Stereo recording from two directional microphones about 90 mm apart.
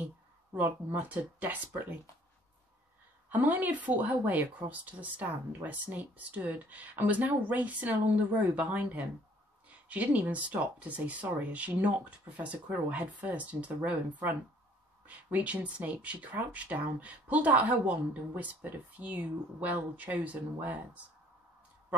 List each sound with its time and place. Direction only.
0.6 s speech: 20° right (ahead or behind)
3.3 s speech: 20° right (ahead or behind)
15.0 s speech: 15° right (ahead or behind)